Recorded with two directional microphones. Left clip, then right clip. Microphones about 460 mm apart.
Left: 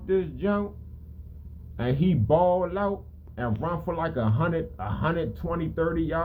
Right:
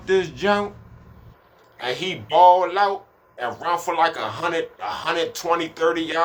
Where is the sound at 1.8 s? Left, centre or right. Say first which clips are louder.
Right 3 dB; centre.